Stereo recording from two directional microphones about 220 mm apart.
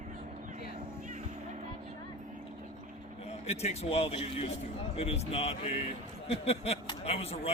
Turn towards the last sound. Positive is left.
turn(degrees=25)  # may be behind; listen again after turning